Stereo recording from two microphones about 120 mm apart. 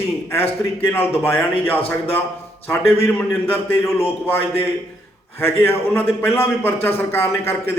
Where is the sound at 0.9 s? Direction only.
15° left (ahead or behind).